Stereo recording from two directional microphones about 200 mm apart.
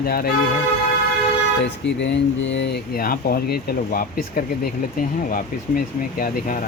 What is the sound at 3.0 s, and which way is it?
Speech, 50° left (ahead or behind).